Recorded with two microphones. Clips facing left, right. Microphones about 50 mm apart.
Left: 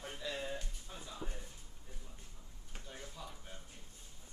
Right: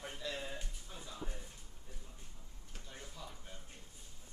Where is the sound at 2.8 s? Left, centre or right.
Centre.